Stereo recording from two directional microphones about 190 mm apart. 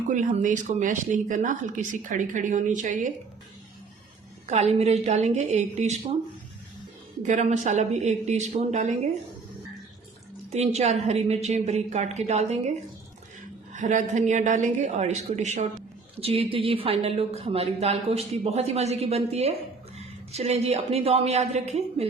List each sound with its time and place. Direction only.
0.1 s a woman's voice: 40° right (ahead or behind)
4.4 s a woman's voice: 35° right (ahead or behind)
7.2 s a woman's voice: 40° right (ahead or behind)
10.5 s a woman's voice: 35° right (ahead or behind)
13.7 s a woman's voice: 40° right (ahead or behind)